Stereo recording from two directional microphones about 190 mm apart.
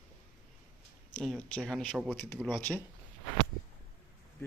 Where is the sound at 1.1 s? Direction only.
5° left (ahead or behind).